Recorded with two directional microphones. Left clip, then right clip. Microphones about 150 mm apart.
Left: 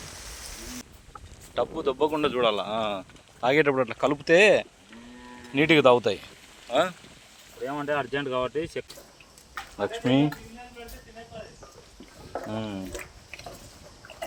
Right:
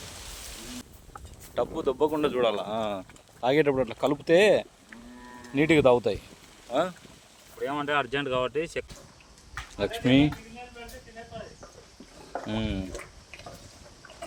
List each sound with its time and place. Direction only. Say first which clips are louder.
1.8 s speech: even; 15° right (ahead or behind)
3.4 s speech: left 2 dB; 5° right (ahead or behind)
7.9 s speech: even; 30° left (ahead or behind)
9.7 s speech: right 1 dB; 30° right (ahead or behind)
12.5 s speech: right 3 dB; 25° right (ahead or behind)